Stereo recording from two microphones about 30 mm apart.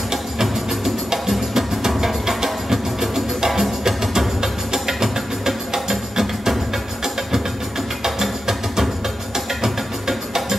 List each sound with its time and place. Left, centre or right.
0.1 s music: centre
8.0 s music: centre